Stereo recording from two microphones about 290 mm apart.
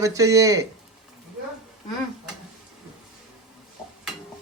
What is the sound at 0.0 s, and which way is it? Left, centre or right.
Speech, centre.